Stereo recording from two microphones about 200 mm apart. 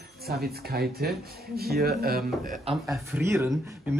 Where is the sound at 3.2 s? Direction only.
15° right (ahead or behind).